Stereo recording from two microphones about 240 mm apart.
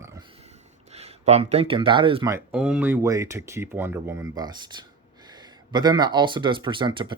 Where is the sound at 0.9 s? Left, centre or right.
Right.